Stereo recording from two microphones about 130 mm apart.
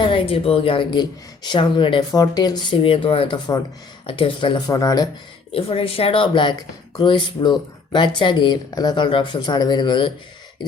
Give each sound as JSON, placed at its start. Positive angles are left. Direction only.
{"t": 0.0, "sound": "speech", "side_deg": 40}
{"t": 5.5, "sound": "speech", "side_deg": 45}